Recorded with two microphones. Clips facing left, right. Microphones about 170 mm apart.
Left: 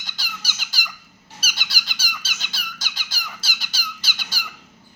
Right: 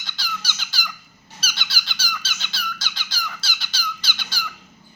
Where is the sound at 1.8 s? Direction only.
10° left (ahead or behind).